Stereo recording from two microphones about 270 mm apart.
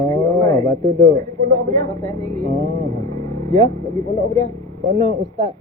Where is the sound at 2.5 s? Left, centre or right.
Right.